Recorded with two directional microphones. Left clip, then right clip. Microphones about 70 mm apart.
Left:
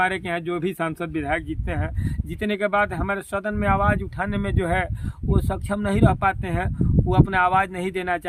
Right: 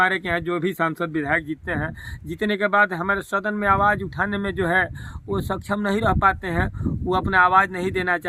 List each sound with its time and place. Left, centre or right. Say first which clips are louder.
0.0 s speech: right 3 dB; right
7.6 s speech: right 3 dB; centre